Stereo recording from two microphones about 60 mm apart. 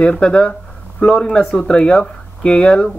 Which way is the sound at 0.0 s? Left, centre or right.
Centre.